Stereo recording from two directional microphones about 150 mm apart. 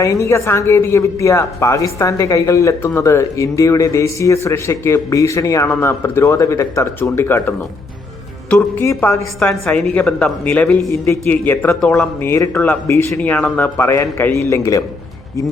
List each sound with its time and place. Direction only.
0.0 s speech: 20° left (ahead or behind); by 11.0 s 5° left (ahead or behind)
11.0 s speech: 15° left (ahead or behind)